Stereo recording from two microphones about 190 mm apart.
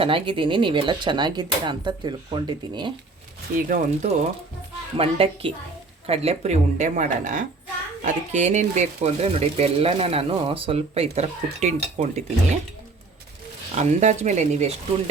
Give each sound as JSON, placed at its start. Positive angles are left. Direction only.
{"t": 0.0, "sound": "speech", "side_deg": -25}
{"t": 3.7, "sound": "speech", "side_deg": -35}
{"t": 13.7, "sound": "speech", "side_deg": -40}